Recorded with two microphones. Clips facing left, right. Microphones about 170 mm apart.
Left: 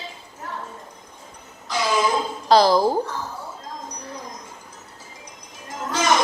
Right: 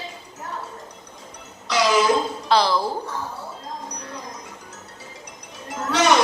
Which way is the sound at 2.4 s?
40° left (ahead or behind).